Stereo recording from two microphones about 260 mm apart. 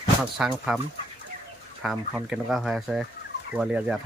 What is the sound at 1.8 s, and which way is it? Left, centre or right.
Speech, centre.